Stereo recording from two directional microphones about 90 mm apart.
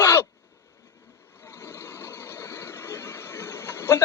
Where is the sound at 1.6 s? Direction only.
30° left (ahead or behind).